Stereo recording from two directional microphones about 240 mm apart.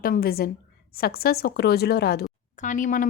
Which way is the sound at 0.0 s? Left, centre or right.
Left.